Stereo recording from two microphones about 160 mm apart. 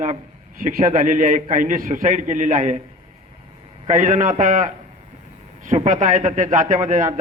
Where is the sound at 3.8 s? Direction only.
50° right (ahead or behind).